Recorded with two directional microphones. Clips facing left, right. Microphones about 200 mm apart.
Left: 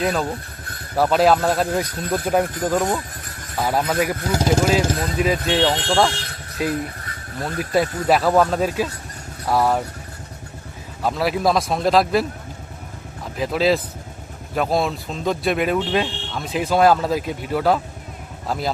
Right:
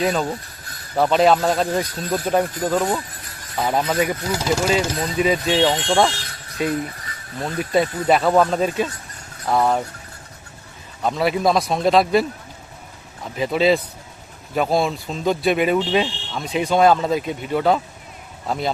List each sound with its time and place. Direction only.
0.0 s speech: centre (ahead or behind)
3.6 s speech: centre (ahead or behind)
4.3 s speech: 50° left (ahead or behind)
4.9 s speech: centre (ahead or behind)
11.0 s speech: centre (ahead or behind)
13.3 s speech: centre (ahead or behind)